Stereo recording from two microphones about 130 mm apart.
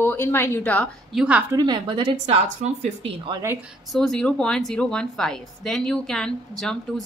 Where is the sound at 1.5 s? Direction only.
35° right (ahead or behind).